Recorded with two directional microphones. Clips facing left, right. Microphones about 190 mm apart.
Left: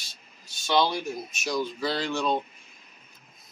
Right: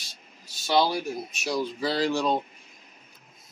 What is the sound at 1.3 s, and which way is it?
Speech, 30° right (ahead or behind).